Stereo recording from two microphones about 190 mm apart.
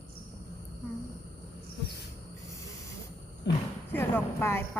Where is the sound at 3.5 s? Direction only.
65° left (ahead or behind).